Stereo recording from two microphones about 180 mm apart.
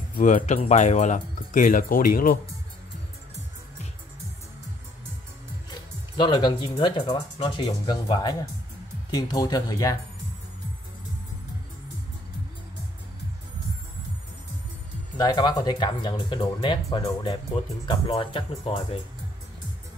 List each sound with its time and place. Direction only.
0.1 s speech: 45° left (ahead or behind)
5.7 s speech: 25° left (ahead or behind)
15.1 s speech: 20° left (ahead or behind)